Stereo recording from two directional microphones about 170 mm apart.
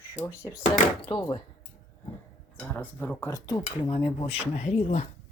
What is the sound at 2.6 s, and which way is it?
Speech, 10° left (ahead or behind).